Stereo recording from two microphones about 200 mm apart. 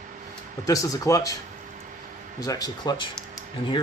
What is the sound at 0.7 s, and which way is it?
Speech, 15° left (ahead or behind).